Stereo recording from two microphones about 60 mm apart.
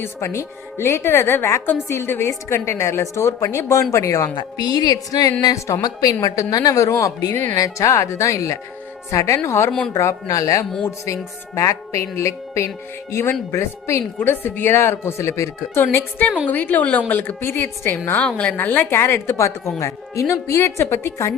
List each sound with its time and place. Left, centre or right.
0.0 s a woman's voice: left
5.5 s speech: left
5.8 s a woman's voice: left
6.5 s speech: left
9.5 s a woman's voice: left
14.2 s a woman's voice: left
18.3 s a woman's voice: centre
18.5 s speech: left
18.9 s a woman's voice: left